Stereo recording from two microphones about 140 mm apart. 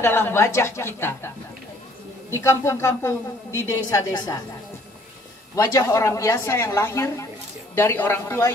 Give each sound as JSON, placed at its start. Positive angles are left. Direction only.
{"t": 0.0, "sound": "a woman's voice", "side_deg": 15}
{"t": 2.4, "sound": "a woman's voice", "side_deg": 20}
{"t": 5.6, "sound": "a woman's voice", "side_deg": 25}